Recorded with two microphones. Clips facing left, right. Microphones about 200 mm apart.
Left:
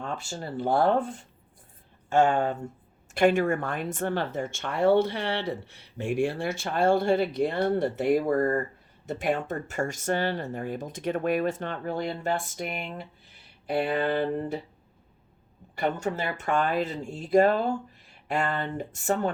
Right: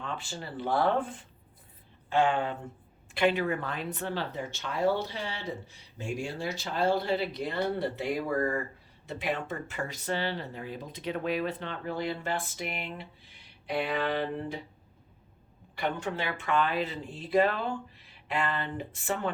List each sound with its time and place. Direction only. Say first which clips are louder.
0.0 s speech: left 4 dB; 45° left (ahead or behind)
15.7 s speech: left 4 dB; 45° left (ahead or behind)